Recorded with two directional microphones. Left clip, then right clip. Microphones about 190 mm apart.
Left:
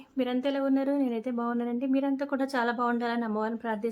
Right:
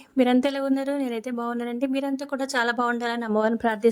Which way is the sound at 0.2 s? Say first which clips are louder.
Right 7 dB; 45° right (ahead or behind).